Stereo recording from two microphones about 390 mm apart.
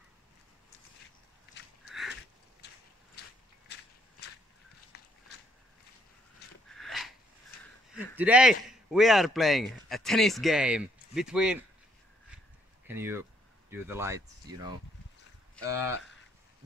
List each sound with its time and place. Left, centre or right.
1.9 s sniff: centre
2.6 s clip-clop: left
3.2 s mechanisms: left
3.7 s a sound: left
4.2 s walk: left
4.9 s a sound: left
6.7 s a sound: centre
7.9 s a man's voice: centre
12.8 s speech: centre